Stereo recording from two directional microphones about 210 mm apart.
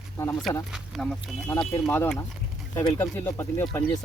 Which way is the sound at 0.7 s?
Centre (ahead or behind).